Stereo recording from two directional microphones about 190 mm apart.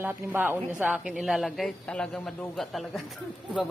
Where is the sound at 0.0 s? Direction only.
10° right (ahead or behind).